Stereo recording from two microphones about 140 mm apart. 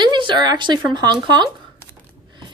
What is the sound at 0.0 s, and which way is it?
Speech, 35° right (ahead or behind).